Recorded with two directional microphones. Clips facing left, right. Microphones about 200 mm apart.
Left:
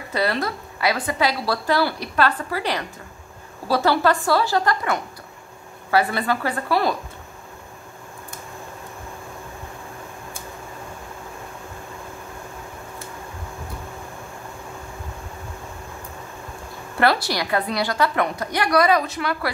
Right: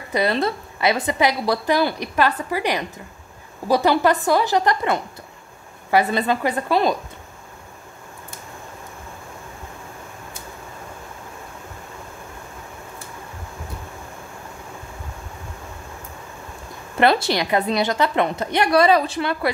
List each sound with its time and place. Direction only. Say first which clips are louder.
0.1 s a woman's voice: right 3 dB; 20° right (ahead or behind)
17.0 s a woman's voice: right 3 dB; 20° right (ahead or behind)